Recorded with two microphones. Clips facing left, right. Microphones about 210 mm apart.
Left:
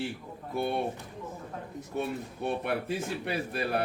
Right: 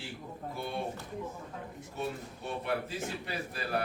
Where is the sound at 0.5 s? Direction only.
60° left (ahead or behind).